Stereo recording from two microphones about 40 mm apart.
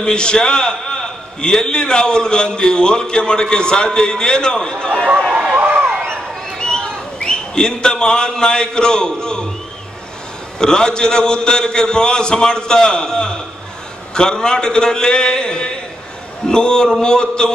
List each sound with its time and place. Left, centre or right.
0.0 s a man's voice: left
5.6 s a sound: right
6.6 s a man's voice: centre
10.6 s a man's voice: centre